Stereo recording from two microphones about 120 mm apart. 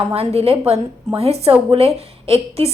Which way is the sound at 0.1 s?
55° right (ahead or behind).